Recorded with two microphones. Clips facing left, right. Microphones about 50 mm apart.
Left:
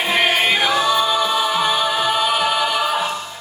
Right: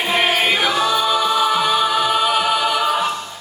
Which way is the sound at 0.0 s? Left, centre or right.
Centre.